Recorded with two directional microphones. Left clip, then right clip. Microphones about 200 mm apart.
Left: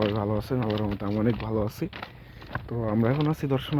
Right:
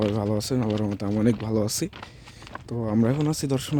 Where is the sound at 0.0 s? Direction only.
40° right (ahead or behind).